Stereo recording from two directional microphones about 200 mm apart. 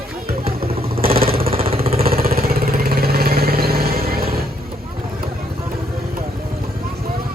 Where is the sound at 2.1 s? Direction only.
50° right (ahead or behind).